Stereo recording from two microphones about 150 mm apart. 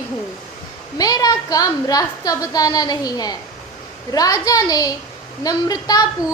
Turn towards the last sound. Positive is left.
turn(degrees=25)  # may be behind; listen again after turning